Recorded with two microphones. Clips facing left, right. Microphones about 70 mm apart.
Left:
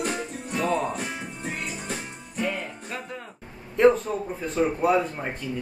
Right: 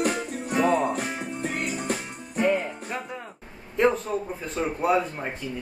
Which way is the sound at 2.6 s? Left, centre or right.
Centre.